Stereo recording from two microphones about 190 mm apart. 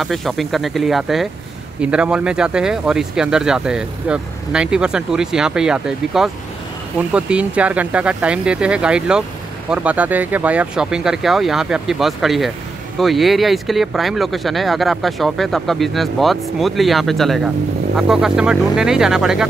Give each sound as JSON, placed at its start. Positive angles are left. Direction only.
{"t": 0.0, "sound": "speech", "side_deg": 0}